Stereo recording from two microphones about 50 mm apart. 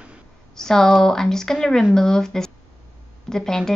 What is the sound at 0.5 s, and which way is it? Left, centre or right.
Speech, centre.